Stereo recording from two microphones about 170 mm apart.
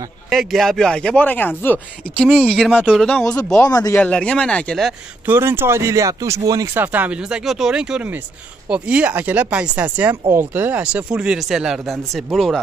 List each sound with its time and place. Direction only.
0.3 s speech: centre (ahead or behind)
3.6 s speech: 20° left (ahead or behind)
4.0 s speech: 5° left (ahead or behind)
5.2 s speech: 10° right (ahead or behind)